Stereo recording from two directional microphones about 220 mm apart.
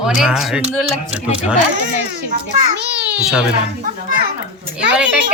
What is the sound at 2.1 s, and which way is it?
Speech, 50° right (ahead or behind).